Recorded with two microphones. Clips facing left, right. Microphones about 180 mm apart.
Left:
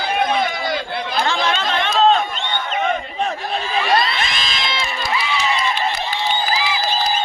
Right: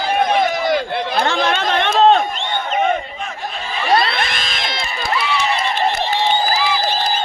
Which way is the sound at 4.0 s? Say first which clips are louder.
Right 1 dB; 60° right (ahead or behind).